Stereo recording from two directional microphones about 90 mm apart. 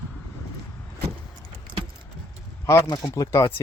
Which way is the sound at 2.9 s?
40° left (ahead or behind).